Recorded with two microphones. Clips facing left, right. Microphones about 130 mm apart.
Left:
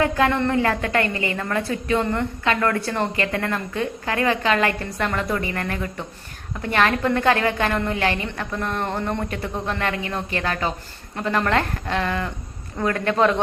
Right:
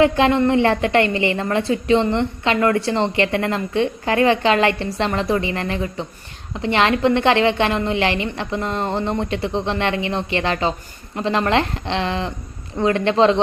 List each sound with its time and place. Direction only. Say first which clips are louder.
0.0 s a woman's voice: right 5 dB; 20° right (ahead or behind)